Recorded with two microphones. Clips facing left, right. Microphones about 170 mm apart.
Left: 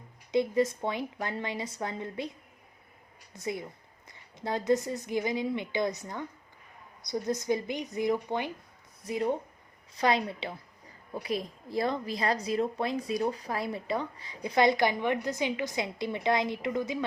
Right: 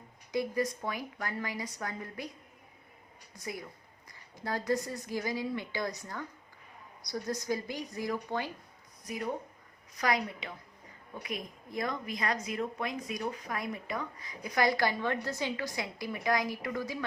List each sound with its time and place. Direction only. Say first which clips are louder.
0.3 s a woman's voice: left 5 dB; 25° left (ahead or behind)
3.3 s a woman's voice: left 6 dB; 25° left (ahead or behind)